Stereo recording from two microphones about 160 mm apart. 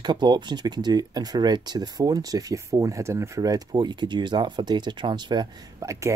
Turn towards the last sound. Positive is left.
turn(degrees=-20)  # may be behind; listen again after turning